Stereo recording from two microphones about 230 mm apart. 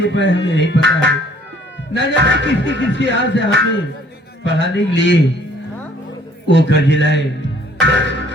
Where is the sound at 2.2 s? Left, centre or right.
Right.